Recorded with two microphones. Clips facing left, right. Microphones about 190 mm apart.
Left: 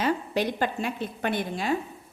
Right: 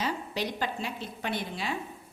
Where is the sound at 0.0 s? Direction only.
55° left (ahead or behind).